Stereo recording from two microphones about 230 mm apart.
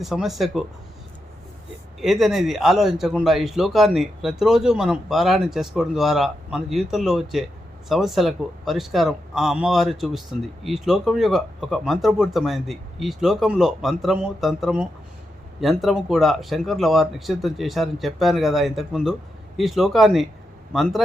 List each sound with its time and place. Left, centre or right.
0.0 s a man's voice: centre
2.0 s a man's voice: centre